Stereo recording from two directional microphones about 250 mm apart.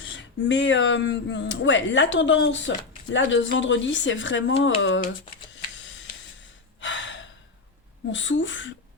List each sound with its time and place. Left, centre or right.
0.0 s speech: left
6.7 s gasp: left
8.1 s speech: left